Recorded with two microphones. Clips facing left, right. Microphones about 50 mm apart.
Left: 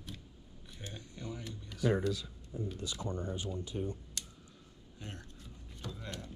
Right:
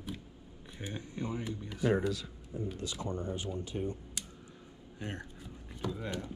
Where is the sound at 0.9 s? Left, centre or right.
Right.